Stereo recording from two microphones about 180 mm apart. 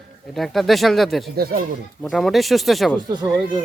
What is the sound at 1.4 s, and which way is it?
Speech, 55° right (ahead or behind).